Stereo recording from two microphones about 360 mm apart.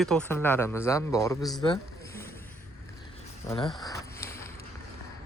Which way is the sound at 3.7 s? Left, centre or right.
Centre.